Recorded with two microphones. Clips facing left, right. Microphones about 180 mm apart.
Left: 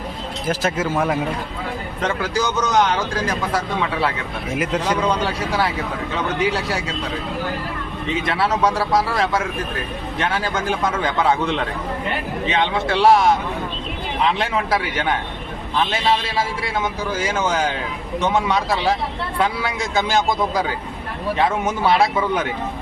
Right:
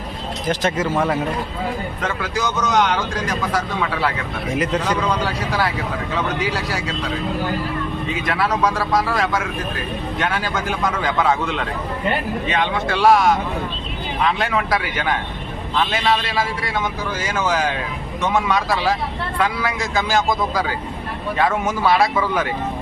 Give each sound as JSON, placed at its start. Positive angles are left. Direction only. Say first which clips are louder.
{"t": 0.4, "sound": "speech", "louder": "right 1 dB", "side_deg": 5}
{"t": 2.7, "sound": "speech", "louder": "left 1 dB", "side_deg": 30}
{"t": 4.5, "sound": "speech", "louder": "even", "side_deg": 10}
{"t": 5.2, "sound": "speech", "louder": "even", "side_deg": 25}
{"t": 8.3, "sound": "speech", "louder": "even", "side_deg": 25}
{"t": 16.0, "sound": "speech", "louder": "even", "side_deg": 25}